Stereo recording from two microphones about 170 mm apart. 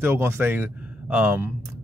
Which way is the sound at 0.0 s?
15° right (ahead or behind).